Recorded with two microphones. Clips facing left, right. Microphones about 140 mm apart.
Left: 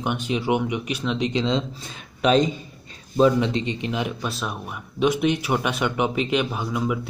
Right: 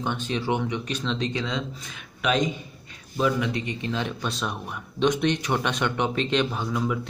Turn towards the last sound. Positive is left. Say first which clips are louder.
# left 2 dB
turn(degrees=5)  # may be behind; listen again after turning